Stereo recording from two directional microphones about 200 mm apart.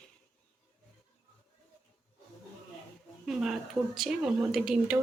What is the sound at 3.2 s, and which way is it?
A woman's voice, centre (ahead or behind).